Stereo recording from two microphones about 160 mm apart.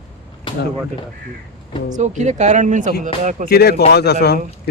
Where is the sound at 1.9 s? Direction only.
50° right (ahead or behind).